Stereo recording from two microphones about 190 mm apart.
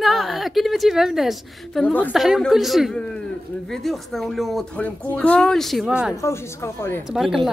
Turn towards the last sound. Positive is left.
turn(degrees=0)  # may be behind; listen again after turning